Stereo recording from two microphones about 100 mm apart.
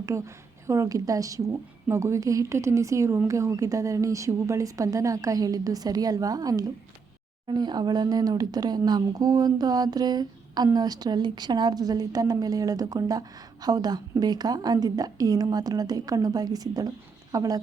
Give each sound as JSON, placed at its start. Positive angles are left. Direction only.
{"t": 0.1, "sound": "a woman's voice", "side_deg": -30}